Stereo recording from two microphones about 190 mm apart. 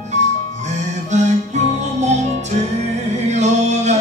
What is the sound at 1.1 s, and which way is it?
Music, 40° right (ahead or behind).